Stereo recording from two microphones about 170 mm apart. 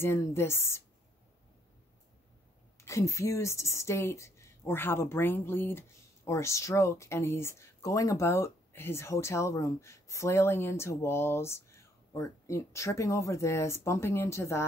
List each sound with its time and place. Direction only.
0.0 s a woman's voice: 15° left (ahead or behind)
2.8 s a woman's voice: 15° left (ahead or behind)